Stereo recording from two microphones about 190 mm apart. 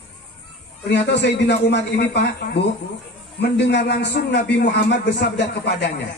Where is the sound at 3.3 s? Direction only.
60° left (ahead or behind).